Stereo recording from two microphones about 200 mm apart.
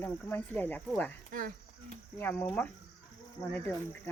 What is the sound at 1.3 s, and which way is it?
Speech, 45° right (ahead or behind).